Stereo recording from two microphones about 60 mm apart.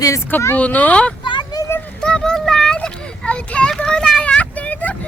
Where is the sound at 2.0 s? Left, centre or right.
Centre.